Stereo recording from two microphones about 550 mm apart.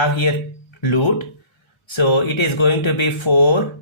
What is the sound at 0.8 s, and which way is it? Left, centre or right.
Speech, left.